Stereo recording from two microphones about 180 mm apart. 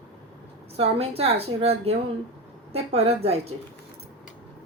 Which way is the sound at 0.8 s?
35° right (ahead or behind).